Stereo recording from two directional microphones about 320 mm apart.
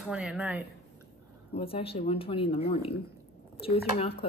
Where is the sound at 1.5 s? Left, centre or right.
Centre.